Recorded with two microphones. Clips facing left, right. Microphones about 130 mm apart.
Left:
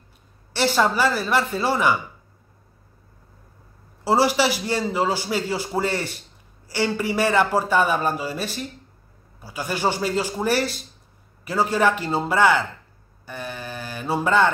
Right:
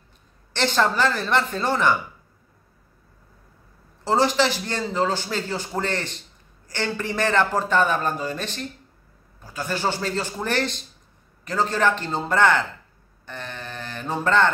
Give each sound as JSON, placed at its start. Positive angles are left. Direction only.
{"t": 0.5, "sound": "a man's voice", "side_deg": 10}
{"t": 4.0, "sound": "a man's voice", "side_deg": 10}
{"t": 13.2, "sound": "mantra", "side_deg": 10}